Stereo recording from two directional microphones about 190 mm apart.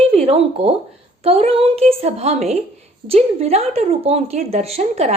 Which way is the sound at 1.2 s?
30° right (ahead or behind).